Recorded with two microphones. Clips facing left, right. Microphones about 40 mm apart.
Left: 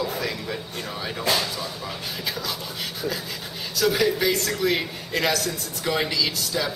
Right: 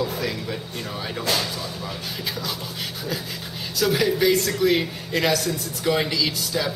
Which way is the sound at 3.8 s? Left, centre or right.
Centre.